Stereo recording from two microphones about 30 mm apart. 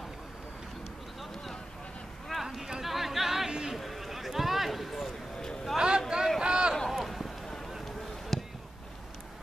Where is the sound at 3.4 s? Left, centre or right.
Right.